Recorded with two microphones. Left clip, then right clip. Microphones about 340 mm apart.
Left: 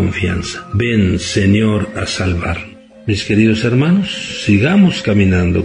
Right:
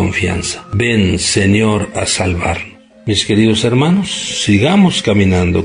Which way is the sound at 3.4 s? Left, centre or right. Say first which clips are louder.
Right 2 dB; right.